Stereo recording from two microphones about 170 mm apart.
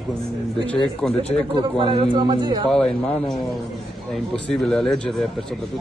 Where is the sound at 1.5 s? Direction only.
30° right (ahead or behind).